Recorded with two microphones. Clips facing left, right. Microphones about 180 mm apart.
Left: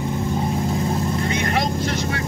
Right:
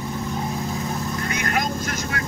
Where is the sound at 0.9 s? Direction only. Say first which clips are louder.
Left 5 dB; 25° left (ahead or behind).